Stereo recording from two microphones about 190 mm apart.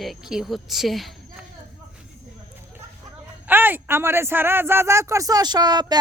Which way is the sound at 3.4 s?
10° right (ahead or behind).